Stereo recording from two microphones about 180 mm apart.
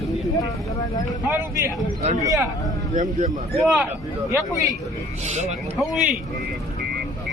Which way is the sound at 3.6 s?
Centre (ahead or behind).